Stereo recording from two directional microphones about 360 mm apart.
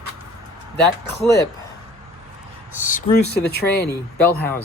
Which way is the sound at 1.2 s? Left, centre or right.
Centre.